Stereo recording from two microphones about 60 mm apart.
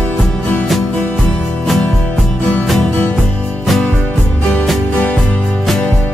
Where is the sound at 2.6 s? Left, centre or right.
Centre.